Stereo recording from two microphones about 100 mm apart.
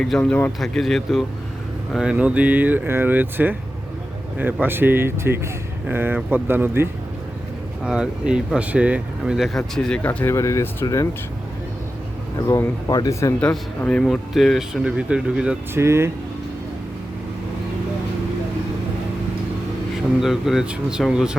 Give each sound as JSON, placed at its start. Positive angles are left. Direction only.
{"t": 0.2, "sound": "a man's voice", "side_deg": 15}
{"t": 0.6, "sound": "speech", "side_deg": 5}
{"t": 4.6, "sound": "speech", "side_deg": -20}
{"t": 7.9, "sound": "speech", "side_deg": -10}
{"t": 10.1, "sound": "speech", "side_deg": 20}
{"t": 12.5, "sound": "speech", "side_deg": 35}
{"t": 13.4, "sound": "a man's voice", "side_deg": 15}
{"t": 14.0, "sound": "speech", "side_deg": 0}
{"t": 15.7, "sound": "speech", "side_deg": -25}
{"t": 20.1, "sound": "speech", "side_deg": -5}